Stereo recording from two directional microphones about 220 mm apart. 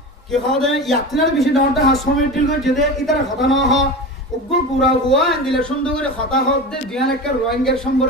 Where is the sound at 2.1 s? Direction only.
45° left (ahead or behind).